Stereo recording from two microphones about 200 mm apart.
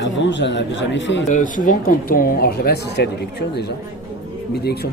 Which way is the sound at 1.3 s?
40° left (ahead or behind).